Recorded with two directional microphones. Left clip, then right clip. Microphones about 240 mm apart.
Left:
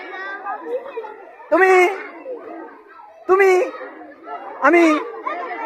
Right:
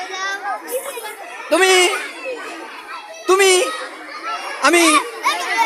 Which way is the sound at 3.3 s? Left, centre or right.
Centre.